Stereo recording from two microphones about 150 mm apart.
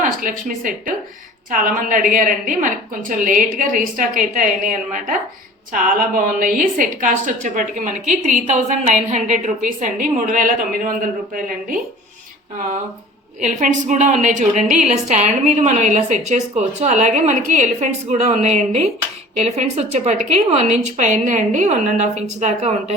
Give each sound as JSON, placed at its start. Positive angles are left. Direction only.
{"t": 0.0, "sound": "a woman's voice", "side_deg": -65}
{"t": 5.7, "sound": "a woman's voice", "side_deg": -65}
{"t": 13.4, "sound": "a woman's voice", "side_deg": -55}